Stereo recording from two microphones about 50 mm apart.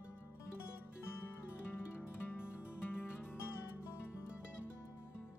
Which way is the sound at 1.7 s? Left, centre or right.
Left.